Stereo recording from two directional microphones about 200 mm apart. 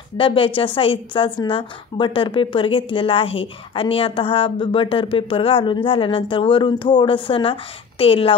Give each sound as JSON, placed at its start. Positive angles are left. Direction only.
{"t": 0.2, "sound": "a woman's voice", "side_deg": 25}